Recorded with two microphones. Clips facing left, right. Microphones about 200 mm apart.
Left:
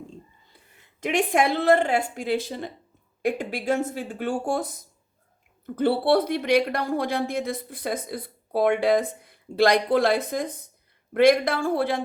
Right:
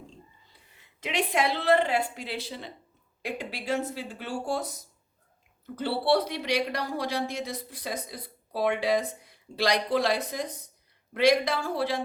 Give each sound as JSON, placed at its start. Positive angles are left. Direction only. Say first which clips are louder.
{"t": 1.0, "sound": "speech", "louder": "left 5 dB", "side_deg": 50}